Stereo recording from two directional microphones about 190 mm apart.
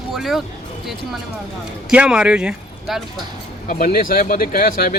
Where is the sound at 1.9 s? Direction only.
5° right (ahead or behind).